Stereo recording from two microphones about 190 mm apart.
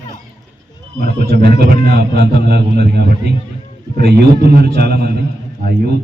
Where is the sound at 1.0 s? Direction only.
55° right (ahead or behind).